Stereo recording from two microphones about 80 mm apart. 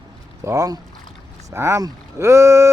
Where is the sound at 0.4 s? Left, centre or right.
Right.